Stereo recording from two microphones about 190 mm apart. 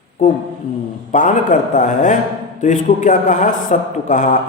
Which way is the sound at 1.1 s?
40° left (ahead or behind).